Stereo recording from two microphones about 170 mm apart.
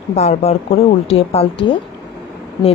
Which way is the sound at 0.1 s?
40° left (ahead or behind).